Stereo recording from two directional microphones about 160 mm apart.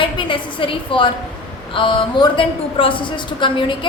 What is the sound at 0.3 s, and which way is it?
A woman's voice, 30° left (ahead or behind).